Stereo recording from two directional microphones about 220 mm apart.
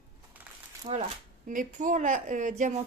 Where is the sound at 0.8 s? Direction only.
30° right (ahead or behind).